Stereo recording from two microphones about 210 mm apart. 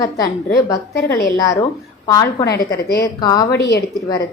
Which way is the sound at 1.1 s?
15° left (ahead or behind).